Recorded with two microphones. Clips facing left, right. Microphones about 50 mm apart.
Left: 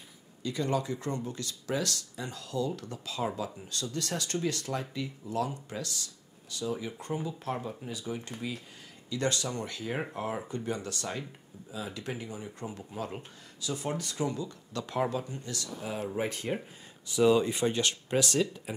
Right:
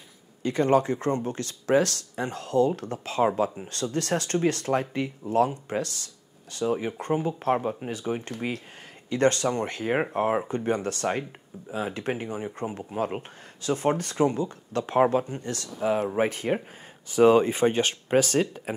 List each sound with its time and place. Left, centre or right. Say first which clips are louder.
0.4 s speech: right 9 dB; right
16.1 s speech: right 7 dB; right